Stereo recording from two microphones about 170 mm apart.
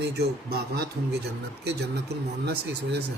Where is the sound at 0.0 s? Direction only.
75° right (ahead or behind).